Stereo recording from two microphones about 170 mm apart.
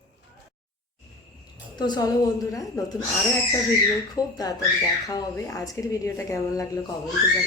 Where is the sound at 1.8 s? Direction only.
25° left (ahead or behind).